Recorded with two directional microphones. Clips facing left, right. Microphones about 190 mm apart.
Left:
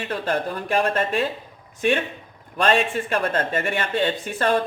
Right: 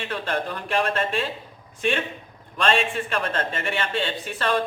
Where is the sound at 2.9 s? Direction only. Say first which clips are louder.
Left 3 dB; 50° left (ahead or behind).